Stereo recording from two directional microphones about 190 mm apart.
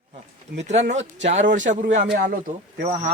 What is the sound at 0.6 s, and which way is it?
Speech, 35° right (ahead or behind).